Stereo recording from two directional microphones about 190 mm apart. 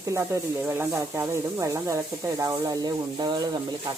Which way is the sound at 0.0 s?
15° right (ahead or behind).